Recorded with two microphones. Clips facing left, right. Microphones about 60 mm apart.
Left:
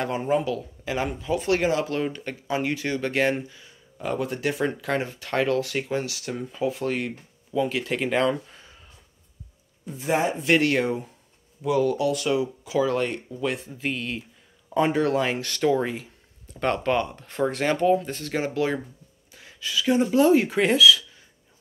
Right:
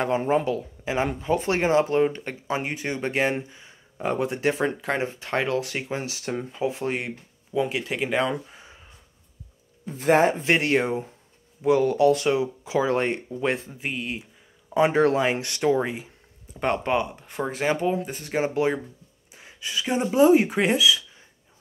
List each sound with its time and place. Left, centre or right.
0.0 s speech: right
8.0 s speech: centre
9.8 s speech: right
10.4 s speech: right
13.7 s speech: centre
14.9 s speech: right
15.1 s speech: right